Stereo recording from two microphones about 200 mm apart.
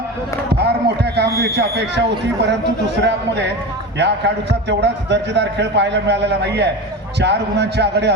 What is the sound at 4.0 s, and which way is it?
A man's voice, 60° right (ahead or behind).